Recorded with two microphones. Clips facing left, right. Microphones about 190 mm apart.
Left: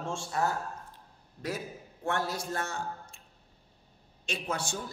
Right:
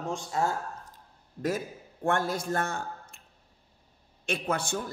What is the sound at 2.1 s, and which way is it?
A man's voice, 50° right (ahead or behind).